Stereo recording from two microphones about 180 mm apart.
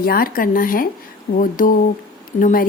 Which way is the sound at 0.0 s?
55° left (ahead or behind).